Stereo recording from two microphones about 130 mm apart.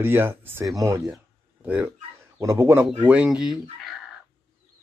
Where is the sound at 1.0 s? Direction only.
5° right (ahead or behind).